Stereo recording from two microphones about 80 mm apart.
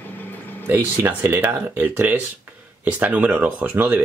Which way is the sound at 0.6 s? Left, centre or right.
Right.